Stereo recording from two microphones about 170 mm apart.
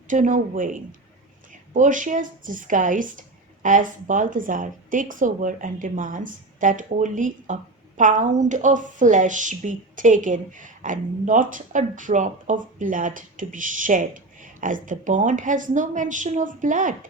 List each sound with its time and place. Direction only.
0.1 s speech: 50° right (ahead or behind)